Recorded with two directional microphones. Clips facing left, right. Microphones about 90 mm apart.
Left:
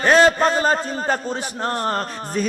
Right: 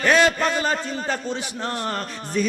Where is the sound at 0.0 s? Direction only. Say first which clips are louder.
Left 4 dB; 35° left (ahead or behind).